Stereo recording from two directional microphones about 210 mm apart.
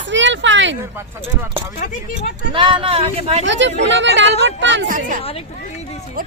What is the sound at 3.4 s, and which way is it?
Speech, 60° right (ahead or behind).